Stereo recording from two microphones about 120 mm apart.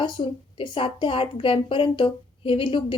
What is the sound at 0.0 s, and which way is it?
A woman's voice, 45° left (ahead or behind).